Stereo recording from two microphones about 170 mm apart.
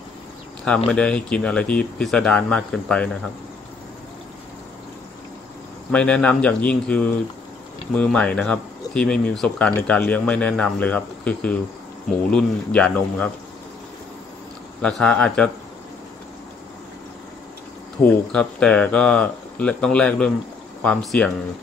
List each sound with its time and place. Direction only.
0.8 s speech: 5° left (ahead or behind)
5.9 s speech: 5° left (ahead or behind)
14.8 s speech: 5° left (ahead or behind)
18.0 s speech: 5° left (ahead or behind)